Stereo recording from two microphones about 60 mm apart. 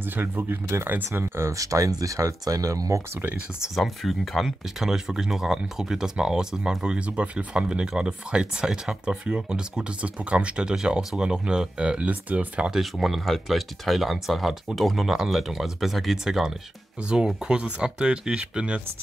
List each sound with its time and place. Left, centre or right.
0.0 s speech: right
1.1 s speech: right
3.6 s speech: centre; by 12.7 s right
12.7 s speech: centre